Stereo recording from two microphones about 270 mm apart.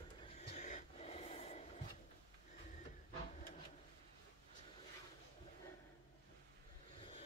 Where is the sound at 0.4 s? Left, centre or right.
Left.